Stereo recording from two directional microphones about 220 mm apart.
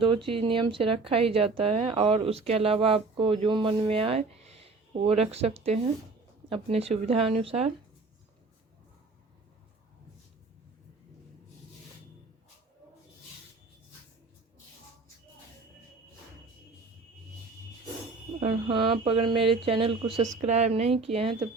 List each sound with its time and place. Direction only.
0.0 s speech: 25° right (ahead or behind)
18.3 s speech: 25° right (ahead or behind)